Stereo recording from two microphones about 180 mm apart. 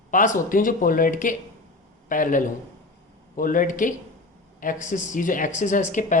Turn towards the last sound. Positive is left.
turn(degrees=45)  # may be behind; listen again after turning